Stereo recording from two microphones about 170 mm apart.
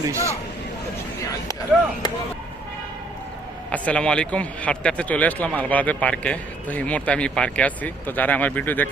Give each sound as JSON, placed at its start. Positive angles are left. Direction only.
{"t": 0.0, "sound": "speech", "side_deg": -15}
{"t": 3.7, "sound": "a man's voice", "side_deg": 5}